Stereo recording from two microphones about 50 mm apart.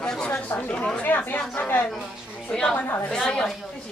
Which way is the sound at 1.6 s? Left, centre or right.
Left.